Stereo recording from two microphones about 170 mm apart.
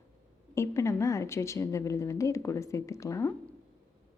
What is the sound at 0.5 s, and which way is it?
A woman's voice, 15° left (ahead or behind).